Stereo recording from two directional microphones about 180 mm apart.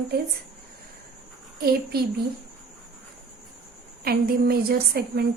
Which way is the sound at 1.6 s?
60° right (ahead or behind).